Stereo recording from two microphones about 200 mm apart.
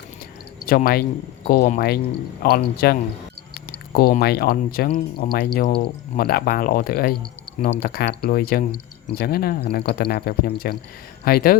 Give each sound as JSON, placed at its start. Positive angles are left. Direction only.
{"t": 0.6, "sound": "speech", "side_deg": 45}